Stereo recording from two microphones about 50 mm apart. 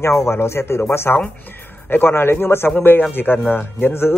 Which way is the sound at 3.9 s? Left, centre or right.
Left.